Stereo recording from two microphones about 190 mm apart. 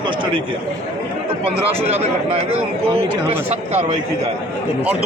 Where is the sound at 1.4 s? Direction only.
30° right (ahead or behind).